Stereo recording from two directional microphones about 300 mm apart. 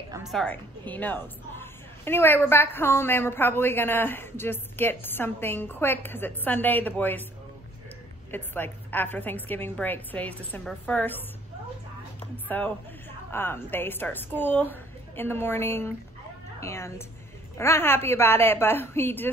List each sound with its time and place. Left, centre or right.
0.1 s a woman's voice: centre
8.3 s a woman's voice: centre
12.4 s a woman's voice: centre